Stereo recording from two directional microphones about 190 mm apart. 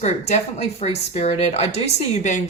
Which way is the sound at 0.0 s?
35° left (ahead or behind).